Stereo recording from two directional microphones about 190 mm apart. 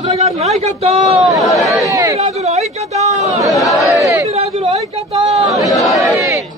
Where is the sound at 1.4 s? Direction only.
Centre (ahead or behind).